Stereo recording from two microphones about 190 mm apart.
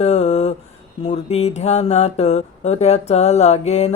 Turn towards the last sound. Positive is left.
turn(degrees=35)  # may be behind; listen again after turning